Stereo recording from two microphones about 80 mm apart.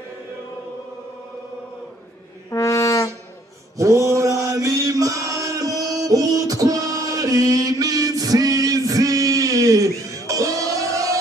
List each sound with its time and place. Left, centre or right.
2.5 s brass instrument: left
3.7 s chant: right